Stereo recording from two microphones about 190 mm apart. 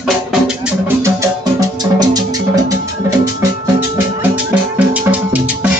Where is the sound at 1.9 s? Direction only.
20° right (ahead or behind).